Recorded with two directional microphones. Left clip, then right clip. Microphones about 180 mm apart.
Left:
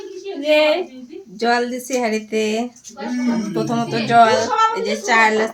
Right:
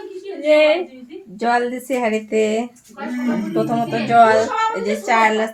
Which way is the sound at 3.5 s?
40° right (ahead or behind).